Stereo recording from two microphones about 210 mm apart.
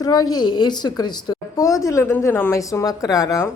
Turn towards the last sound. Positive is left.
turn(degrees=15)  # may be behind; listen again after turning